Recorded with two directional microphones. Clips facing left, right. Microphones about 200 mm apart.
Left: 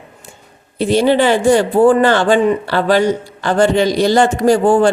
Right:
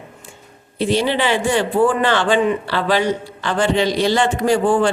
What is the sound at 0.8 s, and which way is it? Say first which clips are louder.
Speech: left 6 dB; 45° left (ahead or behind).